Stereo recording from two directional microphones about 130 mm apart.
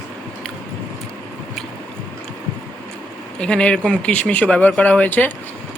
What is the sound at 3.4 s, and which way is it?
Speech, 10° left (ahead or behind).